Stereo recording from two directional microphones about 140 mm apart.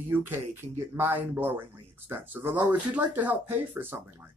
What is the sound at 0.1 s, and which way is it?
Speech, 15° right (ahead or behind).